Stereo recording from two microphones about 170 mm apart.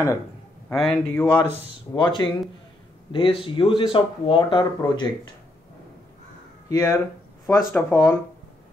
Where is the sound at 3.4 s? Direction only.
30° left (ahead or behind).